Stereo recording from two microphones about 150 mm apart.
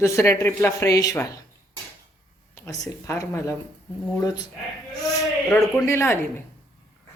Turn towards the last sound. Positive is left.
turn(degrees=15)  # may be behind; listen again after turning